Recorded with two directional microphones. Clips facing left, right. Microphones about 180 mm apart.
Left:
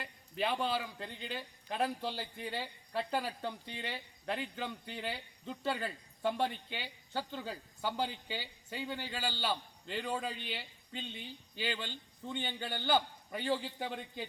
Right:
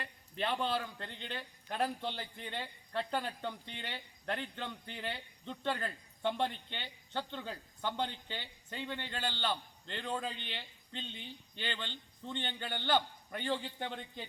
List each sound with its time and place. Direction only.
0.0 s a man's voice: 5° left (ahead or behind)